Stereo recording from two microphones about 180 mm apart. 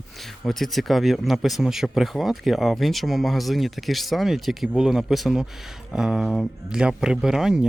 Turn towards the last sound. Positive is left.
turn(degrees=-5)  # may be behind; listen again after turning